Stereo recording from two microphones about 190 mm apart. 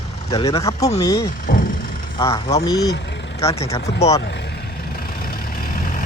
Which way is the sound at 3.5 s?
35° left (ahead or behind).